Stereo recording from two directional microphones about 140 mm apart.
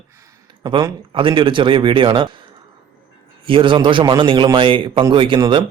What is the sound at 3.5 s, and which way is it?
A man's voice, 40° right (ahead or behind).